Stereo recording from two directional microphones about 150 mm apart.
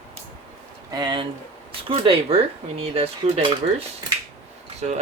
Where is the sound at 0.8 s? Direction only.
30° right (ahead or behind).